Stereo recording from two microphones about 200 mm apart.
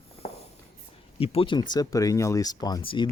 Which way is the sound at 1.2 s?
30° left (ahead or behind).